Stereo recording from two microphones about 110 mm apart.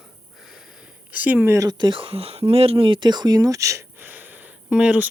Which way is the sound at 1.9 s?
55° right (ahead or behind).